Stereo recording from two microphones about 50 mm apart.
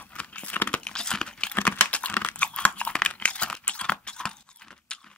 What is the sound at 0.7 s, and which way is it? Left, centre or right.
Crumpling, centre.